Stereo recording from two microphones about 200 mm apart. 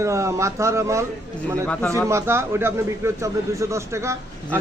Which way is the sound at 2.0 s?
15° right (ahead or behind).